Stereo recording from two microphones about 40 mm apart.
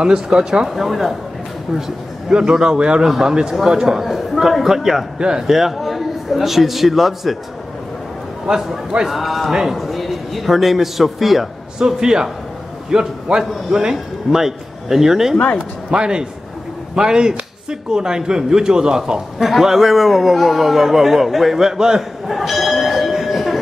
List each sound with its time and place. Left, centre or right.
0.0 s speech: centre
0.7 s a man's voice: centre; by 3.1 s right
3.1 s a man's voice: centre
8.5 s a man's voice: centre
9.0 s a man's voice: centre
11.8 s a man's voice: centre
22.3 s bell: centre